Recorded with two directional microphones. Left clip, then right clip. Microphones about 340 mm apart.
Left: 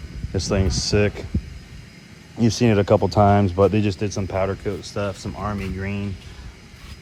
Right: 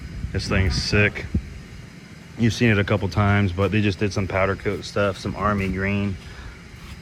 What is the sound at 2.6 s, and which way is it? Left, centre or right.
Speech, centre.